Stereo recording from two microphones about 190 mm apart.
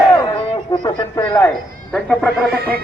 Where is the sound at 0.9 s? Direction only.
20° left (ahead or behind).